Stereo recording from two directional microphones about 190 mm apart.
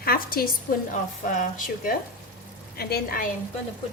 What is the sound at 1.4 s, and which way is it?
A woman's voice, 45° left (ahead or behind).